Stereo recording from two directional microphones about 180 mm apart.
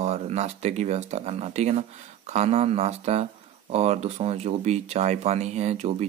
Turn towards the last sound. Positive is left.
turn(degrees=-35)  # may be behind; listen again after turning